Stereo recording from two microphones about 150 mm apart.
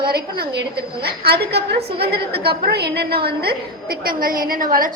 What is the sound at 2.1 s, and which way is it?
A woman's voice, 90° right.